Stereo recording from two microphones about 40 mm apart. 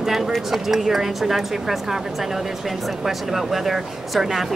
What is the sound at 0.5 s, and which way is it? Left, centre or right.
A woman's voice, centre.